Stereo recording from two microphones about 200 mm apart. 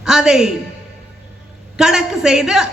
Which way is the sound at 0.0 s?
5° right (ahead or behind).